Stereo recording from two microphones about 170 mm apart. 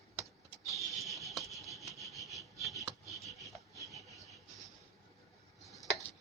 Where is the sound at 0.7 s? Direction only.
Centre (ahead or behind).